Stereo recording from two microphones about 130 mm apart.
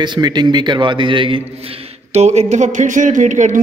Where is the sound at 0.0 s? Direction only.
35° right (ahead or behind).